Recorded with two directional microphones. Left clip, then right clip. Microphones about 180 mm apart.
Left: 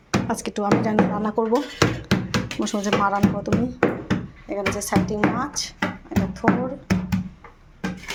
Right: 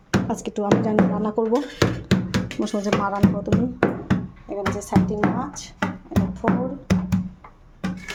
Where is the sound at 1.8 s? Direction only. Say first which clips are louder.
Left 1 dB; 75° right (ahead or behind).